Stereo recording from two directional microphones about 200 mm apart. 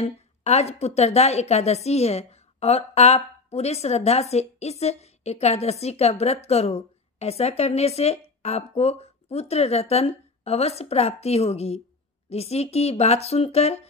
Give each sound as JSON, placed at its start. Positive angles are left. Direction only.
{"t": 0.0, "sound": "a woman's voice", "side_deg": 35}